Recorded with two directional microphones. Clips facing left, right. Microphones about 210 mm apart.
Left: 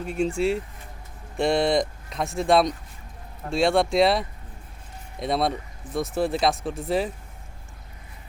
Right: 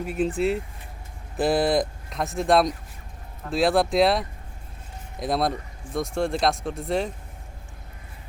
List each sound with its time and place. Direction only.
0.0 s speech: 5° right (ahead or behind)